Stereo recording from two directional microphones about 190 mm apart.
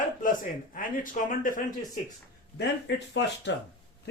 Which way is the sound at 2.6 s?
65° left (ahead or behind).